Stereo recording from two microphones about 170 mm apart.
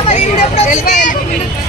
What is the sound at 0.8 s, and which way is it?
Speech, 50° left (ahead or behind).